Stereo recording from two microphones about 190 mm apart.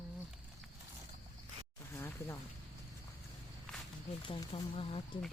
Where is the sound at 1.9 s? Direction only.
15° left (ahead or behind).